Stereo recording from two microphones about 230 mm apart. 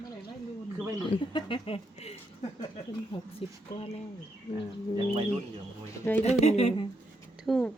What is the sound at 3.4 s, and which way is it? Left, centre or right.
Speech, left.